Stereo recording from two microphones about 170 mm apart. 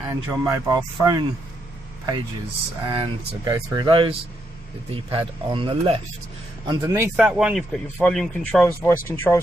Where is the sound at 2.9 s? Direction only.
25° right (ahead or behind).